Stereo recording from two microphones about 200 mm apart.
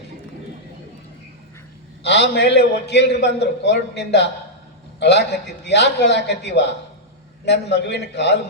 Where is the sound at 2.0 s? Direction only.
60° left (ahead or behind).